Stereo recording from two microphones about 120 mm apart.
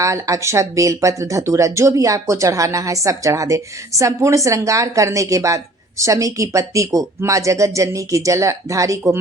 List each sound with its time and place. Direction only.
0.0 s speech: 25° right (ahead or behind)